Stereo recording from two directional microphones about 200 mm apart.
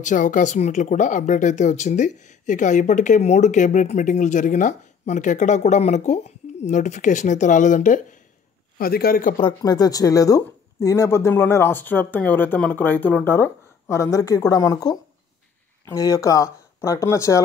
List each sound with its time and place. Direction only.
0.0 s a man's voice: 40° left (ahead or behind)
9.4 s speech: 20° left (ahead or behind)